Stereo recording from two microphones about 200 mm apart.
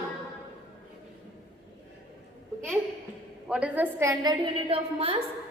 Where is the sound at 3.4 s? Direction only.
5° right (ahead or behind).